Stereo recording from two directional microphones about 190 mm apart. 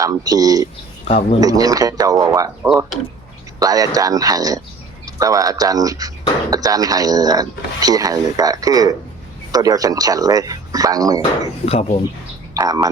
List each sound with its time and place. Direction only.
0.0 s speech: 20° right (ahead or behind)
1.0 s speech: 35° left (ahead or behind)
1.4 s speech: 20° right (ahead or behind)
3.6 s speech: 20° right (ahead or behind)
11.2 s speech: 30° left (ahead or behind)
12.5 s speech: 20° right (ahead or behind)